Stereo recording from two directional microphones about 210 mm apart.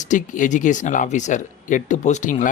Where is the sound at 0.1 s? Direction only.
35° left (ahead or behind).